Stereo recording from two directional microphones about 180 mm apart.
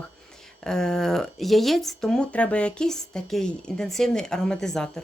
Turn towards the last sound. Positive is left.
turn(degrees=0)  # may be behind; listen again after turning